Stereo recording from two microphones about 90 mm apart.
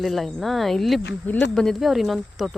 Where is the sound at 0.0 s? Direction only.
5° left (ahead or behind).